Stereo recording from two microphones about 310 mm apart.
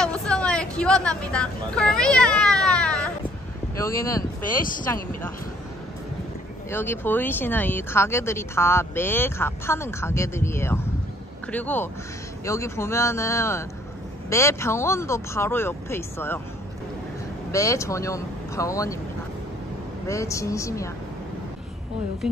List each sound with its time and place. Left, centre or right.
0.0 s vehicle: centre
4.5 s speech: left
6.7 s speech: centre
17.5 s speech: centre
20.1 s speech: centre
22.2 s speech: centre